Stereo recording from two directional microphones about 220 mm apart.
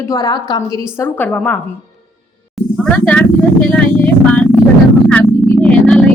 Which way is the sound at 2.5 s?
5° left (ahead or behind).